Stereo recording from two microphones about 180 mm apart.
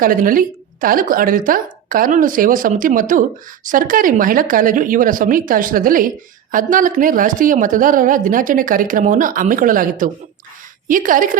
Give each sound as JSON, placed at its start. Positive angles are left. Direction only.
{"t": 0.0, "sound": "a woman's voice", "side_deg": -50}